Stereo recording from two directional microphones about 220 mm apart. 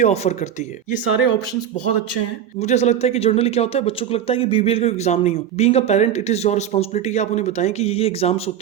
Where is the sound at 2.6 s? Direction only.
30° left (ahead or behind).